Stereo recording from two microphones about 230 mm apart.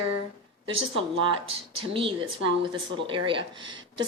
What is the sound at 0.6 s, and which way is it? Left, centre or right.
Speech, right.